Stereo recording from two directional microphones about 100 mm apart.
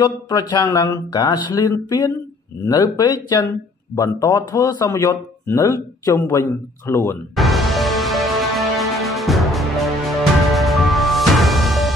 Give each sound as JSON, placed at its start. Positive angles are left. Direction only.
{"t": 0.0, "sound": "speech", "side_deg": 40}
{"t": 7.3, "sound": "music", "side_deg": 0}